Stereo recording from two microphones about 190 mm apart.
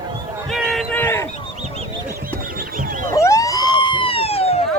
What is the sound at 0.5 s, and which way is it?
Battle cry, centre (ahead or behind).